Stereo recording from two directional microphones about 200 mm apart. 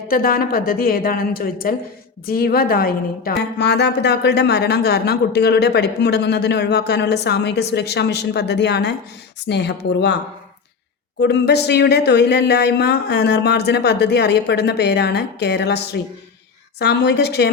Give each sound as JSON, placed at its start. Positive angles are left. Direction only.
{"t": 0.1, "sound": "a woman's voice", "side_deg": 45}
{"t": 11.2, "sound": "speech", "side_deg": 55}